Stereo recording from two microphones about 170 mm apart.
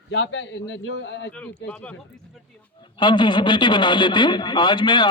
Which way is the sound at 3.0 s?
25° left (ahead or behind).